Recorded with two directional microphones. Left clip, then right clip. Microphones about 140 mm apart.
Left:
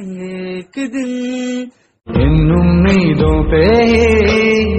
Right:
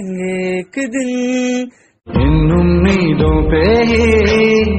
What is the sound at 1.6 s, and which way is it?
Mantra, centre (ahead or behind).